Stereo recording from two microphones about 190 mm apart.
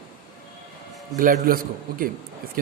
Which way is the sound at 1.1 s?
45° right (ahead or behind).